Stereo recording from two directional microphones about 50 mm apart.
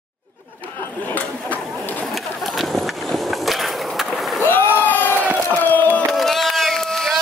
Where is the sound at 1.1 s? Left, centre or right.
Left.